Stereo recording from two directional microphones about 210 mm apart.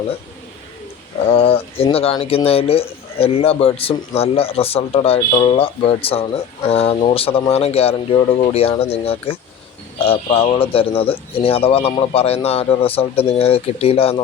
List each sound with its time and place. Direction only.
1.3 s speech: 25° left (ahead or behind)